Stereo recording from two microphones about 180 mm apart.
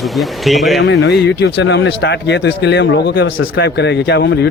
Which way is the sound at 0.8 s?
75° left (ahead or behind).